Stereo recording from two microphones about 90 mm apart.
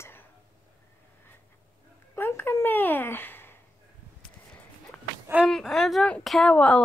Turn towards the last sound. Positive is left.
turn(degrees=10)  # may be behind; listen again after turning